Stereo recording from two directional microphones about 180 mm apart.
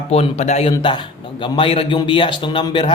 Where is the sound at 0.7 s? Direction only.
25° left (ahead or behind).